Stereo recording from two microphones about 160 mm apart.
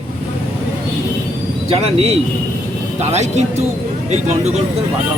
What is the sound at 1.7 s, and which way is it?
Speech, 40° right (ahead or behind).